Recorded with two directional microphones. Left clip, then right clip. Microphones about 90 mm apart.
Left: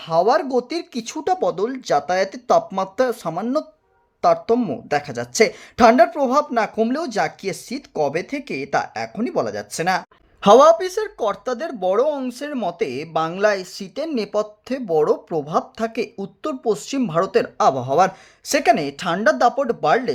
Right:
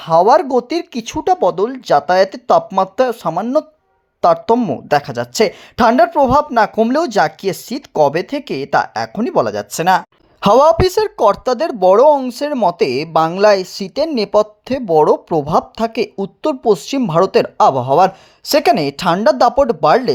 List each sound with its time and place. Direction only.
0.0 s speech: 45° right (ahead or behind); by 3.7 s 25° right (ahead or behind)
4.2 s speech: 40° right (ahead or behind)
5.1 s speech: 30° right (ahead or behind)
6.9 s speech: 50° right (ahead or behind)
8.2 s speech: 40° right (ahead or behind)
10.4 s a woman's voice: 80° right
12.3 s a woman's voice: 55° right (ahead or behind)
12.6 s a woman's voice: 65° right (ahead or behind)
13.3 s speech: 50° right (ahead or behind)
15.8 s speech: 40° right (ahead or behind)
18.6 s a woman's voice: 55° right (ahead or behind)